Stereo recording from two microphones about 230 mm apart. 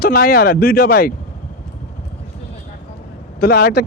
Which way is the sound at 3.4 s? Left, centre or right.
Left.